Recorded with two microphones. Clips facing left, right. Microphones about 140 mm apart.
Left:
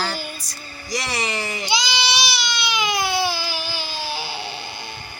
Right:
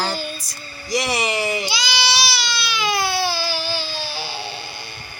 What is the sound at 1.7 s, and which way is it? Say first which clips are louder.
Baby cry: left 1 dB; 20° left (ahead or behind).